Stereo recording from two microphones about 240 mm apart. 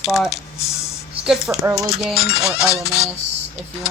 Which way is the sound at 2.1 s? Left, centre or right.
Left.